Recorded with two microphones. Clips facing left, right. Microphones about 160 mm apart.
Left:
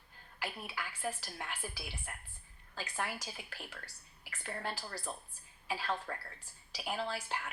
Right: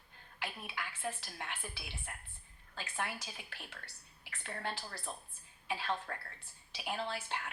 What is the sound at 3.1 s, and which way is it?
Speech, 40° left (ahead or behind).